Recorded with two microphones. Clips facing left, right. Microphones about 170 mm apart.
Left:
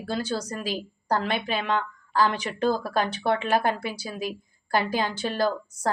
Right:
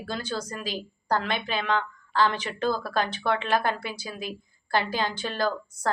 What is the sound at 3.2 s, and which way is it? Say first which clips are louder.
Speech: left 2 dB; 40° left (ahead or behind).